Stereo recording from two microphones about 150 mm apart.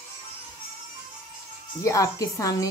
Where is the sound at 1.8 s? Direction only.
20° left (ahead or behind).